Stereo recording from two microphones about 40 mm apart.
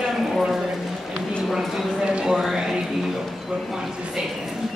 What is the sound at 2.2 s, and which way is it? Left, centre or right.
Speech, centre.